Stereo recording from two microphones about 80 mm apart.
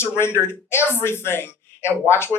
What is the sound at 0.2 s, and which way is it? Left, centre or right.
A man's voice, left.